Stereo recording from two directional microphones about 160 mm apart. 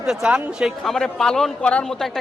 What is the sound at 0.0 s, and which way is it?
A man's voice, 5° right (ahead or behind).